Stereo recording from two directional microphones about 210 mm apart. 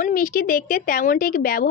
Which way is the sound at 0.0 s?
40° left (ahead or behind).